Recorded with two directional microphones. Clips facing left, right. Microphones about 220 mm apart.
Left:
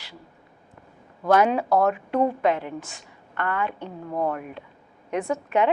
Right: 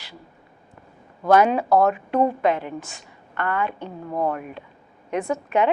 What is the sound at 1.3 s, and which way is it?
A woman's voice, 15° right (ahead or behind).